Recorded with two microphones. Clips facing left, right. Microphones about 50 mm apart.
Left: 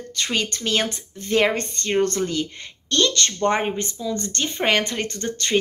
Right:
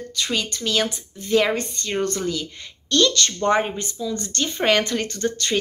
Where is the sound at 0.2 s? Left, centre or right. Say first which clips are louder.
Left 1 dB; left.